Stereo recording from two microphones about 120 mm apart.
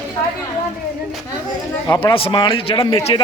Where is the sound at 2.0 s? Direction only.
45° left (ahead or behind).